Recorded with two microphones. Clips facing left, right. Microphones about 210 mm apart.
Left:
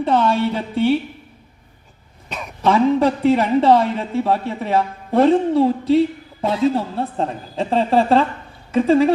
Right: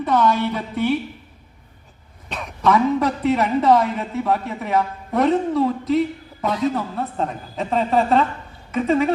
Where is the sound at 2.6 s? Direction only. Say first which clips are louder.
Left 3 dB; 30° left (ahead or behind).